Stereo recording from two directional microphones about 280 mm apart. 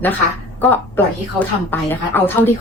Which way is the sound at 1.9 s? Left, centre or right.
Centre.